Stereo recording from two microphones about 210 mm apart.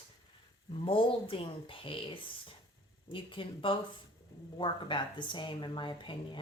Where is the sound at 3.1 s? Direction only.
25° left (ahead or behind).